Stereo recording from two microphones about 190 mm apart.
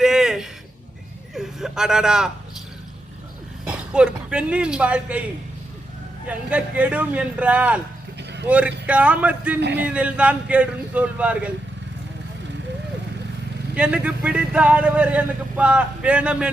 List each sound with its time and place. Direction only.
0.0 s a sound: 5° right (ahead or behind)
3.7 s speech: 5° right (ahead or behind)
6.2 s speech: 5° right (ahead or behind)
9.6 s a man's voice: 65° right (ahead or behind)
9.8 s speech: 5° right (ahead or behind)
13.7 s speech: 5° right (ahead or behind)